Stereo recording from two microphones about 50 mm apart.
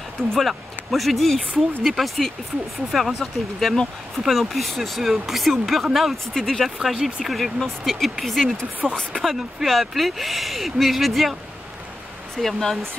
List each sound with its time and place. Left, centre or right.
0.3 s speech: centre
6.8 s speech: centre
8.8 s speech: centre
9.2 s speech: centre
12.4 s speech: centre